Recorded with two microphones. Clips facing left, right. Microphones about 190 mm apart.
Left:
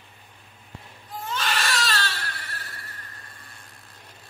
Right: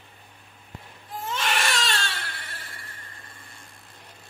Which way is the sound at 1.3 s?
25° right (ahead or behind).